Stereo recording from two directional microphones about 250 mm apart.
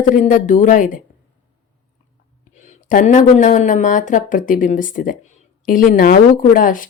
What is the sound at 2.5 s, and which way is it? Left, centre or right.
Speech, left.